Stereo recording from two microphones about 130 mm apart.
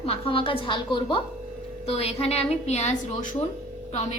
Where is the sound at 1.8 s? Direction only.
50° left (ahead or behind).